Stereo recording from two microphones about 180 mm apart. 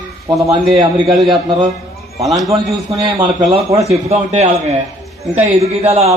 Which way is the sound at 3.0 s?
25° right (ahead or behind).